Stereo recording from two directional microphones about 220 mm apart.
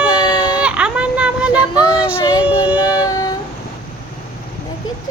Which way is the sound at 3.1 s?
15° left (ahead or behind).